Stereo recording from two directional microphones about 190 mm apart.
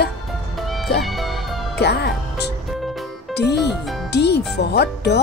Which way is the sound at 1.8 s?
60° left (ahead or behind).